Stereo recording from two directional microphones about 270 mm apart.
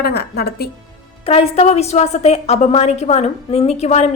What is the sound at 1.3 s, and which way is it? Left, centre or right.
A woman's voice, left.